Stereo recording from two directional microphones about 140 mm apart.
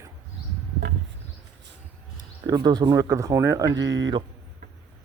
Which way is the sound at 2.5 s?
30° right (ahead or behind).